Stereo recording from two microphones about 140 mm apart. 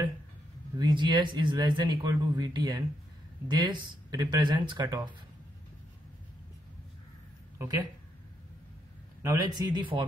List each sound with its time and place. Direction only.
0.7 s speech: 30° right (ahead or behind)
7.5 s a woman's voice: 25° right (ahead or behind)
9.2 s a man's voice: 25° right (ahead or behind)